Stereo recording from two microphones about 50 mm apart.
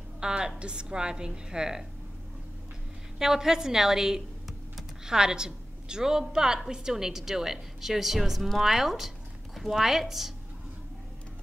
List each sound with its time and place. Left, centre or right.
0.2 s a woman's voice: centre
3.2 s a woman's voice: centre